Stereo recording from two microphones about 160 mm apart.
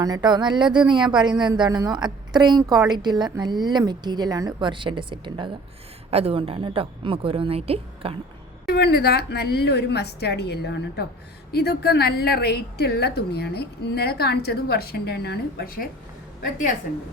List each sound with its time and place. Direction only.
0.0 s a woman's voice: 25° right (ahead or behind)
8.6 s a woman's voice: 90° left; by 15.9 s 70° left (ahead or behind)